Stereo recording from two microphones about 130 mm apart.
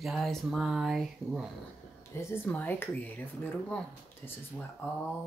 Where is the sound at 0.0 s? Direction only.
Centre (ahead or behind).